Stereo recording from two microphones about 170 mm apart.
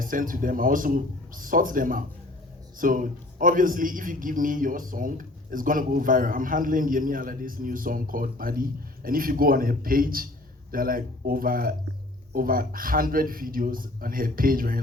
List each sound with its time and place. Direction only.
0.0 s a man's voice: 55° right (ahead or behind)